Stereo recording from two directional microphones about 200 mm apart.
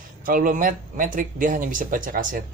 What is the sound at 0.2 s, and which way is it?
Speech, 45° right (ahead or behind).